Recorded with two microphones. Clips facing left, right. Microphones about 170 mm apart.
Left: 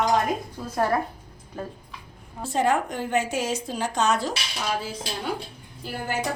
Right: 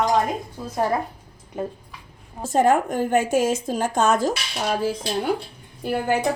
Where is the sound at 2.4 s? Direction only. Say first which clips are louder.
Right 5 dB; 45° right (ahead or behind).